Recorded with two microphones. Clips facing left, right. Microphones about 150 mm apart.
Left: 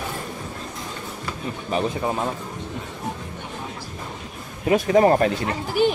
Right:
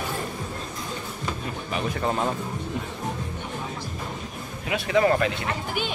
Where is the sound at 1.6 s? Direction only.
35° left (ahead or behind).